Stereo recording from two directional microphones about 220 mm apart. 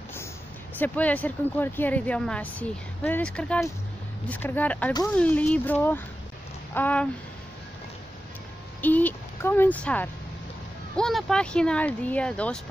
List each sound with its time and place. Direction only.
0.7 s speech: 5° left (ahead or behind)
6.7 s a sound: 5° left (ahead or behind)
8.8 s speech: 10° left (ahead or behind)